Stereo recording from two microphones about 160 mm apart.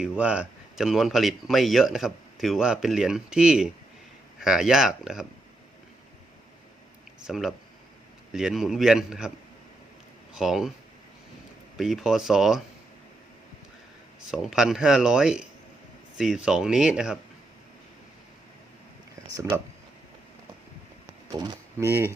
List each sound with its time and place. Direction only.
0.0 s speech: 5° right (ahead or behind)
7.2 s speech: 5° right (ahead or behind)
10.3 s speech: 5° right (ahead or behind)
11.8 s speech: centre (ahead or behind)
14.3 s speech: centre (ahead or behind)
19.3 s speech: 15° right (ahead or behind)
21.3 s speech: 25° right (ahead or behind)